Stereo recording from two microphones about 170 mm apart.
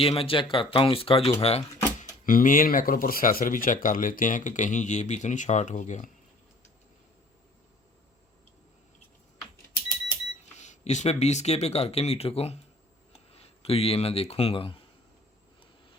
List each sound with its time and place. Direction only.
0.0 s speech: 30° left (ahead or behind)
2.0 s speech: 55° left (ahead or behind)
10.6 s speech: 45° left (ahead or behind)